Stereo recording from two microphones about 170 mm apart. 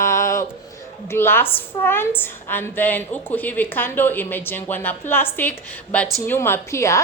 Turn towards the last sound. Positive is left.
turn(degrees=15)  # may be behind; listen again after turning